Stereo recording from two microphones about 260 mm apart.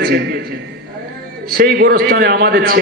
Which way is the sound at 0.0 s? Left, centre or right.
Right.